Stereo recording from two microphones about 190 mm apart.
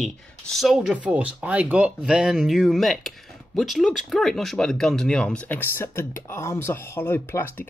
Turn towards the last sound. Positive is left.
turn(degrees=10)  # may be behind; listen again after turning